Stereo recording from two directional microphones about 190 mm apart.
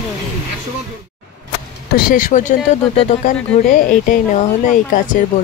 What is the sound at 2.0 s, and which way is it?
Speech, 45° left (ahead or behind).